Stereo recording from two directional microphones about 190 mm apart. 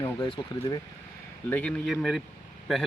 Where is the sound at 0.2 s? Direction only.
25° left (ahead or behind).